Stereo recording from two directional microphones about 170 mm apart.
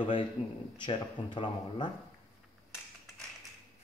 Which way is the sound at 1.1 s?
25° left (ahead or behind).